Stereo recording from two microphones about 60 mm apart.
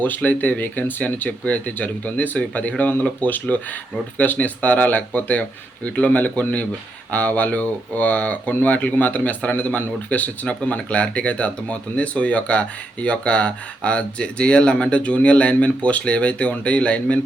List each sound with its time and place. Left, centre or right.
0.0 s speech: left